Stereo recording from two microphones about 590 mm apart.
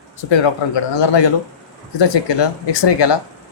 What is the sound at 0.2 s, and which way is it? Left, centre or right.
Speech, left.